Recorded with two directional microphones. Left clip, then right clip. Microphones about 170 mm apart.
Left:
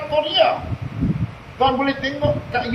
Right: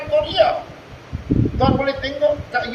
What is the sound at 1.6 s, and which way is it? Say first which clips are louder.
Speech: left 2 dB; 25° right (ahead or behind).